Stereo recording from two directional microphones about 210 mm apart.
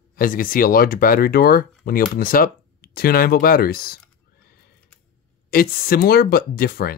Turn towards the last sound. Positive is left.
turn(degrees=45)  # may be behind; listen again after turning